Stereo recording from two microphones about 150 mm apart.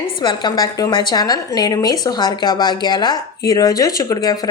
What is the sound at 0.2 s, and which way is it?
A woman's voice, 30° left (ahead or behind).